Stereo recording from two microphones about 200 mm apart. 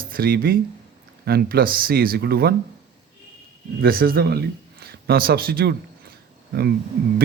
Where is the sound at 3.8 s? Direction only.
45° right (ahead or behind).